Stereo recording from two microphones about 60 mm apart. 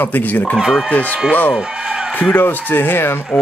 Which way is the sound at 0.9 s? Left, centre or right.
Left.